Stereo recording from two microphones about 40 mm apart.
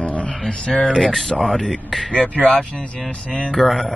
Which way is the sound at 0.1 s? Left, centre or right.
Left.